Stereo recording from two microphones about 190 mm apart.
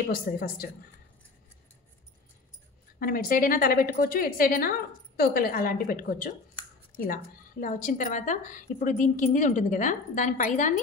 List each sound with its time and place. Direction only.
0.0 s a woman's voice: 50° left (ahead or behind)
3.0 s a woman's voice: 50° left (ahead or behind)
7.6 s a woman's voice: 45° left (ahead or behind)